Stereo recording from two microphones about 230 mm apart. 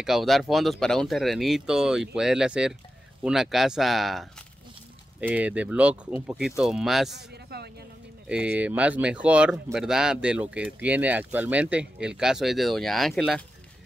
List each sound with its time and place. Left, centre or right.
0.0 s speech: centre
7.2 s speech: right
8.3 s speech: centre